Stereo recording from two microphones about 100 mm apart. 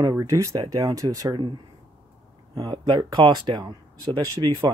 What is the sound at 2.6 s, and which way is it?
Speech, 45° right (ahead or behind).